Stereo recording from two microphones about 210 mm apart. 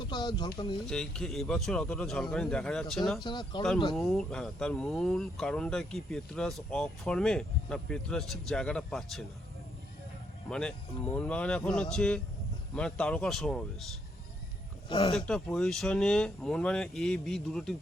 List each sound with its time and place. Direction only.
0.0 s speech: 20° left (ahead or behind)
0.9 s speech: centre (ahead or behind)
3.2 s speech: 20° left (ahead or behind)
3.9 s speech: centre (ahead or behind)
10.5 s speech: 5° left (ahead or behind)
14.8 s speech: 25° left (ahead or behind)
15.1 s speech: 5° left (ahead or behind)